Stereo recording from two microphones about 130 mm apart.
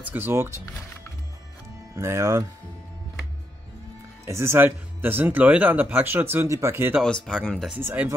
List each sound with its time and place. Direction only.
0.0 s speech: 15° right (ahead or behind)
2.0 s speech: 20° right (ahead or behind)
4.3 s speech: 20° right (ahead or behind)
7.2 s speech: 5° left (ahead or behind)
7.7 s speech: 10° right (ahead or behind)